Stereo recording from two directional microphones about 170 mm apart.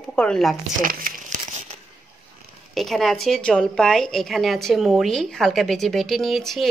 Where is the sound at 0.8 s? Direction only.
55° right (ahead or behind).